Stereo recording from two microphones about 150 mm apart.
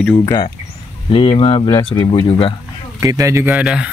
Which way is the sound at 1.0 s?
35° left (ahead or behind).